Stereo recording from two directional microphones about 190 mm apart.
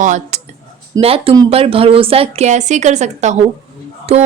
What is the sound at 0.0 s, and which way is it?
Speech, 40° right (ahead or behind).